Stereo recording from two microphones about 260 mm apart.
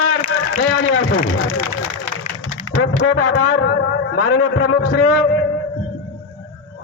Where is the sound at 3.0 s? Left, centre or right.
Left.